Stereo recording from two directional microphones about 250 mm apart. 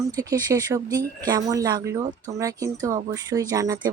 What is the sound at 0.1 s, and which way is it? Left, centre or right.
Speech, centre.